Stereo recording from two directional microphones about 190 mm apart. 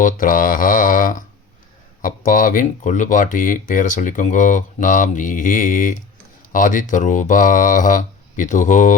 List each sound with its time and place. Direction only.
0.0 s speech: 45° left (ahead or behind)